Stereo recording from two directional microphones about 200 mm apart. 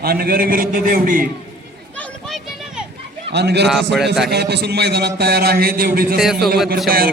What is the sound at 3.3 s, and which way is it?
A man's voice, 55° right (ahead or behind).